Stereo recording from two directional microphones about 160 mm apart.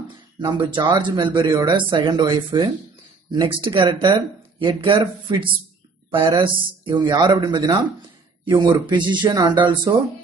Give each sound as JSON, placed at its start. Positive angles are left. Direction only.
{"t": 0.4, "sound": "speech", "side_deg": -30}